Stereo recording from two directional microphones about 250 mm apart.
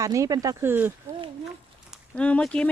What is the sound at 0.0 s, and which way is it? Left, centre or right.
Speech, centre.